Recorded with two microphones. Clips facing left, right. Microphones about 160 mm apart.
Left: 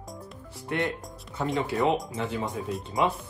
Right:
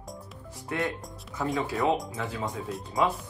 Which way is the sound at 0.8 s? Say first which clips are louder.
Left 1 dB; centre (ahead or behind).